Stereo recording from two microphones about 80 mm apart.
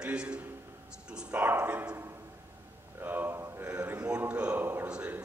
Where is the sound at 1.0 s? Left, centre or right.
Centre.